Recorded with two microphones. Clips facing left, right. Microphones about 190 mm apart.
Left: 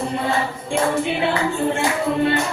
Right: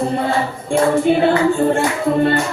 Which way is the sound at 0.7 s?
45° right (ahead or behind).